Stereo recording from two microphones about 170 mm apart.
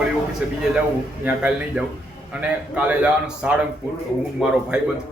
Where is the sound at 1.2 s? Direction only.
10° right (ahead or behind).